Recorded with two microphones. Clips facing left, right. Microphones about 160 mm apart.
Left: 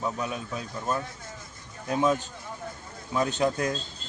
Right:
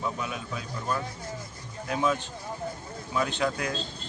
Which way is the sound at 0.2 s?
35° left (ahead or behind).